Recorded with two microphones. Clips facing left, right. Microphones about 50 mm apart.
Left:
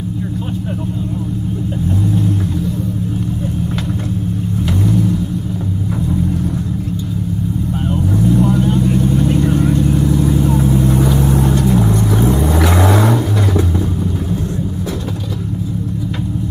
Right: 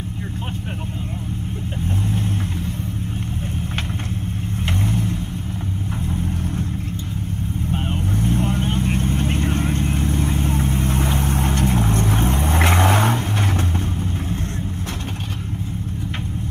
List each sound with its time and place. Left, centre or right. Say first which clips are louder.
2.0 s vehicle: left 7 dB; right
4.6 s vehicle: left 7 dB; right
7.7 s vehicle: left 5 dB; right